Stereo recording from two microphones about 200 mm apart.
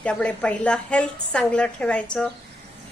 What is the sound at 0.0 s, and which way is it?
A woman's voice, 5° left (ahead or behind).